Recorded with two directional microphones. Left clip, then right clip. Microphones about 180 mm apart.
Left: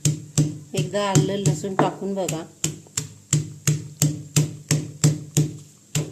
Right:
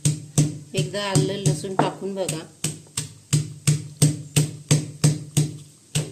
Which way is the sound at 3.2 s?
15° left (ahead or behind).